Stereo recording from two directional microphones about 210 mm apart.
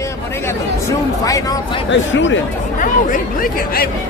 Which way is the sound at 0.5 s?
15° left (ahead or behind).